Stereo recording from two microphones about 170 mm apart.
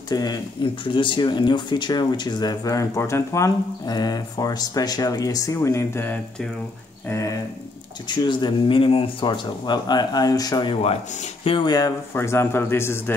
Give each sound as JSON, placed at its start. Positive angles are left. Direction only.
{"t": 0.1, "sound": "speech", "side_deg": 20}